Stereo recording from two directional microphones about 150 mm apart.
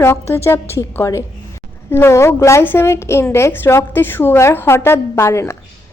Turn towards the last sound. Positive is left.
turn(degrees=20)  # may be behind; listen again after turning